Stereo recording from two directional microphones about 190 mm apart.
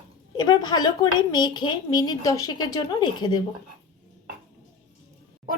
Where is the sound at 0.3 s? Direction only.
25° left (ahead or behind).